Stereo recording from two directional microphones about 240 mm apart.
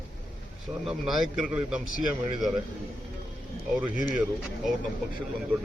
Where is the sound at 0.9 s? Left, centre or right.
Centre.